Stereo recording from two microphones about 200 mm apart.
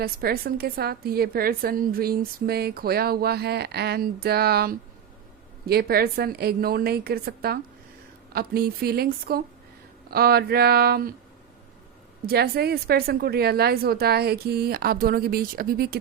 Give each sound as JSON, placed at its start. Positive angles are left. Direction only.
{"t": 0.0, "sound": "a woman's voice", "side_deg": -50}
{"t": 12.2, "sound": "a woman's voice", "side_deg": -50}